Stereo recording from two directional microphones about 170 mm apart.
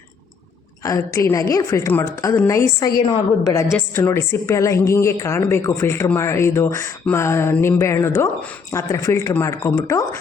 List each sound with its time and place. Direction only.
0.8 s a woman's voice: 20° left (ahead or behind)